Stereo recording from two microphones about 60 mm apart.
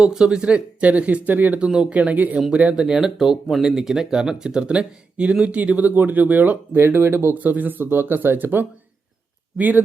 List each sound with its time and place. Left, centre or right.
0.0 s speech: centre; by 1.5 s right
1.5 s speech: centre
1.9 s speech: right
7.3 s speech: right